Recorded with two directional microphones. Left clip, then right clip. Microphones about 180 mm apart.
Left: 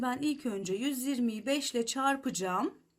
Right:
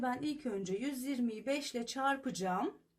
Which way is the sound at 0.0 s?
35° left (ahead or behind).